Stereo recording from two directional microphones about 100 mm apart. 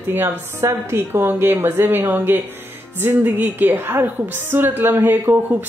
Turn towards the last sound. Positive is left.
turn(degrees=-20)  # may be behind; listen again after turning